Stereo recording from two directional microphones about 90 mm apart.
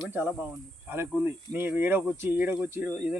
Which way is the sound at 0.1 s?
25° right (ahead or behind).